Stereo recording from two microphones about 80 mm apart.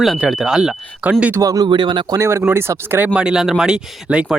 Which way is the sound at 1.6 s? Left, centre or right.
Right.